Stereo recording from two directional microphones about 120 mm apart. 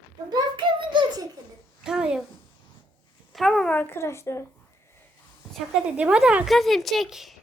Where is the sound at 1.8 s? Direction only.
5° right (ahead or behind).